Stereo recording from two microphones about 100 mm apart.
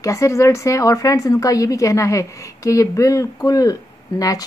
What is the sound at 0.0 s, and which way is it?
A woman's voice, 30° left (ahead or behind).